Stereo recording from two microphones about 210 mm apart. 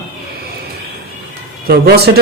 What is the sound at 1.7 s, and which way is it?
Speech, 50° right (ahead or behind).